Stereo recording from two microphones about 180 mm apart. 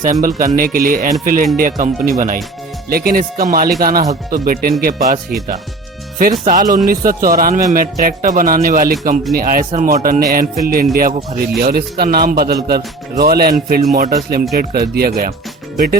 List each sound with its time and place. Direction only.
0.0 s a man's voice: 45° right (ahead or behind)
6.4 s a man's voice: 45° right (ahead or behind)